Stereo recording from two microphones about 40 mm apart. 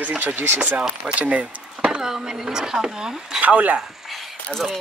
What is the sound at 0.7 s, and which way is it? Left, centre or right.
Speech, right.